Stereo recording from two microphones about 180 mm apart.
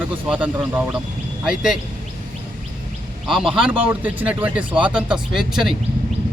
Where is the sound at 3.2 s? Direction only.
Centre (ahead or behind).